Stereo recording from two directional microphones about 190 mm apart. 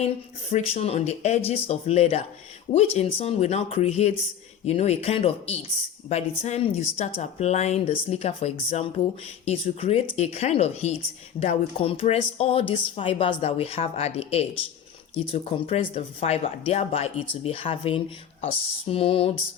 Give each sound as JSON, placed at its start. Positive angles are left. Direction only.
{"t": 0.5, "sound": "speech", "side_deg": 35}